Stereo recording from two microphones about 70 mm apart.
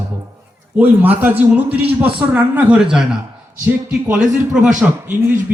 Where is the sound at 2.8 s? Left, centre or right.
Centre.